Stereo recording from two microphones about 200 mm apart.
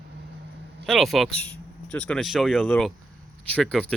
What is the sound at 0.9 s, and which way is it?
Speech, centre (ahead or behind).